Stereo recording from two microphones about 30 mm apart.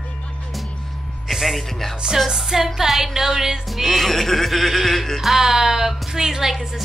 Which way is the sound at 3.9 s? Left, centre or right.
Centre.